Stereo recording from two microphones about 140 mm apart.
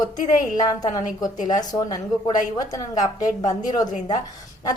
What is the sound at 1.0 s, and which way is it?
Speech, 65° left (ahead or behind).